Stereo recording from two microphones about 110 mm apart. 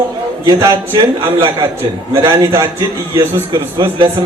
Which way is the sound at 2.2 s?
25° right (ahead or behind).